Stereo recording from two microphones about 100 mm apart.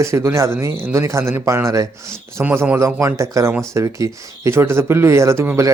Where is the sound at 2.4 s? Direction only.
15° right (ahead or behind).